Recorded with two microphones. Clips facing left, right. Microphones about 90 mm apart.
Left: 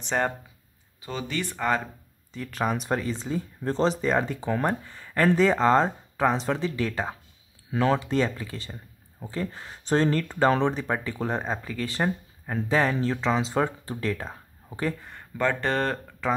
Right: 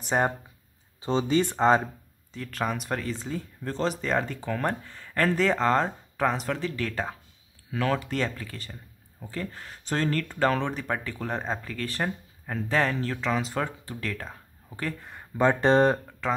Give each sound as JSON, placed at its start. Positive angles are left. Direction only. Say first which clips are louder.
{"t": 0.0, "sound": "speech", "louder": "right 1 dB", "side_deg": -10}
{"t": 1.0, "sound": "speech", "louder": "right 7 dB", "side_deg": -25}
{"t": 2.5, "sound": "speech", "louder": "left 3 dB", "side_deg": 15}
{"t": 3.6, "sound": "speech", "louder": "left 4 dB", "side_deg": 30}
{"t": 4.0, "sound": "speech", "louder": "left 3 dB", "side_deg": 15}
{"t": 15.0, "sound": "speech", "louder": "even", "side_deg": 0}
{"t": 15.3, "sound": "speech", "louder": "right 5 dB", "side_deg": -20}
{"t": 16.2, "sound": "speech", "louder": "left 2 dB", "side_deg": 5}